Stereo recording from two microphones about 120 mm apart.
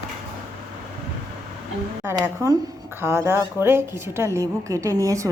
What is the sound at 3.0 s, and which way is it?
A woman's voice, 20° right (ahead or behind).